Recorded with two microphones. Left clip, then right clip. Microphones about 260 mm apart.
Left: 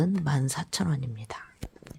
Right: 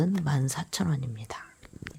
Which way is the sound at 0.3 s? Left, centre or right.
Centre.